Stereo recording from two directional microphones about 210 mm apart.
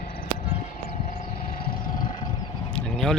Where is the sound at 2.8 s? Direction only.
Centre (ahead or behind).